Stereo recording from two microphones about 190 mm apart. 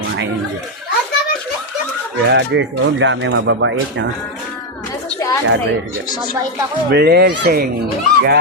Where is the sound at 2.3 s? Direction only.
75° right (ahead or behind).